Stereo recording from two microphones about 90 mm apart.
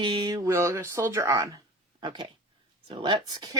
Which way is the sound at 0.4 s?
30° right (ahead or behind).